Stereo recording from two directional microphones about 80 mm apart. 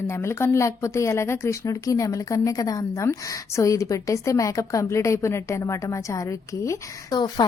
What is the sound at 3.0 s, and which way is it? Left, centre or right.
A woman's voice, left.